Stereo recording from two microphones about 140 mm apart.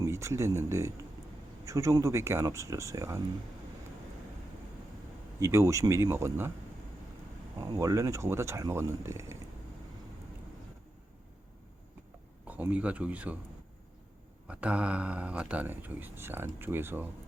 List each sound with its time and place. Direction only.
0.0 s speech: 20° right (ahead or behind)
5.4 s speech: 20° right (ahead or behind)
7.6 s speech: 25° right (ahead or behind)
12.5 s speech: 10° right (ahead or behind)
14.4 s speech: 10° right (ahead or behind)